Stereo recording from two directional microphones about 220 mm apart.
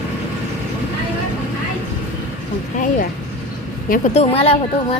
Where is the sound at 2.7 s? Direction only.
35° left (ahead or behind).